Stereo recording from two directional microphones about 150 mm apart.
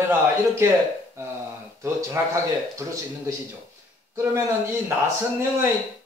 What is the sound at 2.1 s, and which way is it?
Speech, 20° right (ahead or behind).